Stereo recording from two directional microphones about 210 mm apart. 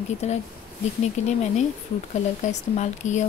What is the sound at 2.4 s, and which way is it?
Speech, 35° left (ahead or behind).